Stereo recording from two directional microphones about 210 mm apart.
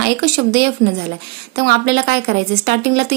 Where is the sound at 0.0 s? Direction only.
50° right (ahead or behind).